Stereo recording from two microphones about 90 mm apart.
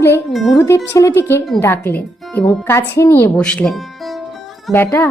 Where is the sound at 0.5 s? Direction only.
35° left (ahead or behind).